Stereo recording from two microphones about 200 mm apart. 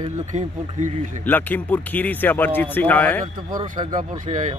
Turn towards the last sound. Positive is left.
turn(degrees=-35)  # may be behind; listen again after turning